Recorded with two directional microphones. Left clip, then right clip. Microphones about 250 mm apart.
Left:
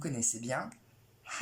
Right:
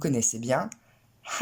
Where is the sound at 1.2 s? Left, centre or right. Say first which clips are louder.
Right 8 dB; right.